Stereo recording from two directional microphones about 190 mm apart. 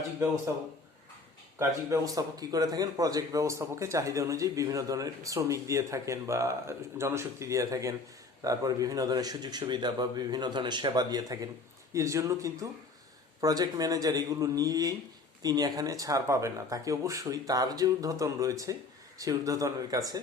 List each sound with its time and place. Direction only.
1.5 s a man's voice: 15° right (ahead or behind)